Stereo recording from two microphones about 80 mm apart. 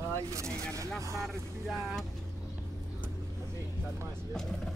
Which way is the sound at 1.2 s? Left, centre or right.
Centre.